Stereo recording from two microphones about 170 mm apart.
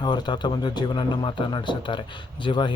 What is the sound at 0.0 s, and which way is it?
A man's voice, 25° left (ahead or behind).